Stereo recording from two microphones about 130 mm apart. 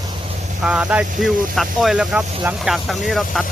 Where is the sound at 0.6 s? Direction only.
10° right (ahead or behind).